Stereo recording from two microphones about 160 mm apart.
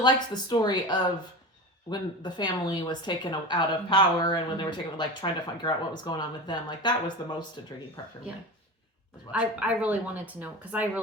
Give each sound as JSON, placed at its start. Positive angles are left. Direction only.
{"t": 0.0, "sound": "speech", "side_deg": 25}
{"t": 9.3, "sound": "speech", "side_deg": -10}